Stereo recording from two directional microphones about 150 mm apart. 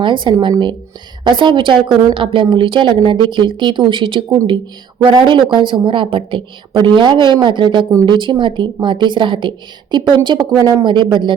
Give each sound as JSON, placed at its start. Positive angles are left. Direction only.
{"t": 0.0, "sound": "a woman's voice", "side_deg": -30}